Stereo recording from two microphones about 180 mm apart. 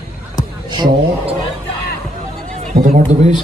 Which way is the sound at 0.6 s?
25° right (ahead or behind).